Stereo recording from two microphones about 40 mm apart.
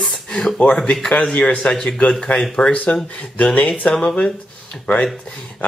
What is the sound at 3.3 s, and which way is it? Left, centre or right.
Speech, left.